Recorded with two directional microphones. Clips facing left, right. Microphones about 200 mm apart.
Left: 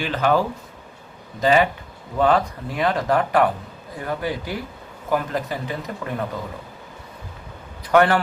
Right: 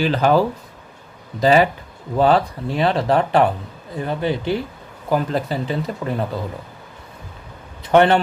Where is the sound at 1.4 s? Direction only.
35° right (ahead or behind).